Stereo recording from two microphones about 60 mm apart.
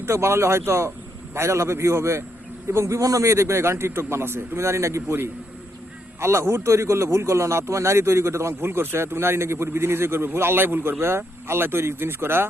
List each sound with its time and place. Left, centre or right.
0.0 s a man's voice: right
3.0 s a man's voice: right
6.1 s a man's voice: right